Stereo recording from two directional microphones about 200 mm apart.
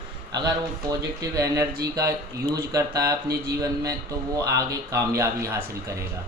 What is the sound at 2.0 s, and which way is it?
Speech, 50° right (ahead or behind).